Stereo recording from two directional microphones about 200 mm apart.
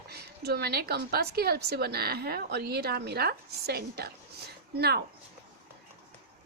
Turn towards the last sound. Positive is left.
turn(degrees=-55)  # may be behind; listen again after turning